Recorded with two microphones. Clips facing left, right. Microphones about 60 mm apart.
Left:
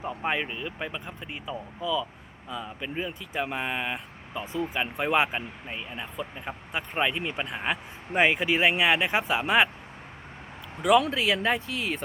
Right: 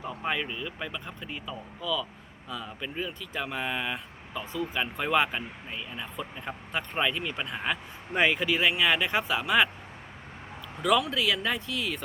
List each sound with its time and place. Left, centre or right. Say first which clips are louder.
0.0 s speech: left 2 dB; left
6.1 s speech: left 2 dB; centre; by 9.6 s left
11.0 s speech: left 3 dB; left